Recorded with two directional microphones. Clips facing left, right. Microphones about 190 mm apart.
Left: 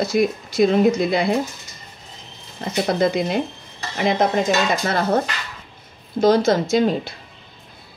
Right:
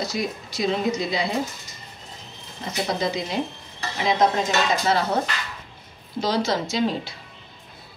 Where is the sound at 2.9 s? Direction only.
55° left (ahead or behind).